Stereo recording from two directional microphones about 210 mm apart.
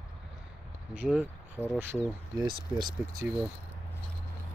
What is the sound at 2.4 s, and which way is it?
Speech, 20° right (ahead or behind).